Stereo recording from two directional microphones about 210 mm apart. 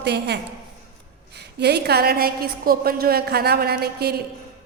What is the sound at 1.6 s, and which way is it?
A woman's voice, 50° right (ahead or behind).